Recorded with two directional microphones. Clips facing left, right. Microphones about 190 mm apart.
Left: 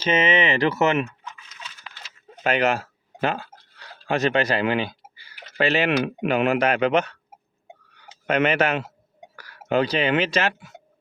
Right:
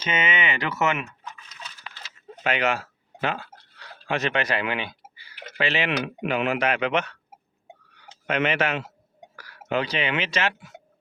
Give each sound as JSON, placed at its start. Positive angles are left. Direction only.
{"t": 0.0, "sound": "speech", "side_deg": 30}
{"t": 2.4, "sound": "a sound", "side_deg": 40}
{"t": 4.1, "sound": "speech", "side_deg": 35}
{"t": 8.3, "sound": "speech", "side_deg": 45}